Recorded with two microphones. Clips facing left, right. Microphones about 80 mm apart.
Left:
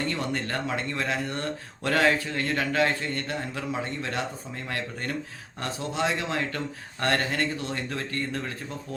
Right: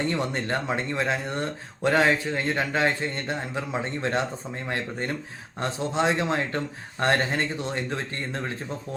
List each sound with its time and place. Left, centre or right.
0.1 s speech: right